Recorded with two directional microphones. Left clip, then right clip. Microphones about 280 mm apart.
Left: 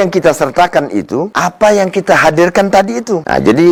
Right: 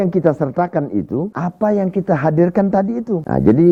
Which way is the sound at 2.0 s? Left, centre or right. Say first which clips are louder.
Left 10 dB; centre.